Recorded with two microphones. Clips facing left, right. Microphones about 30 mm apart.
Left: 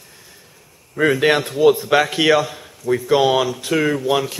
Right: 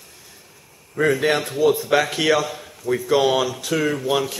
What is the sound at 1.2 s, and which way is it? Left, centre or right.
A man's voice, centre.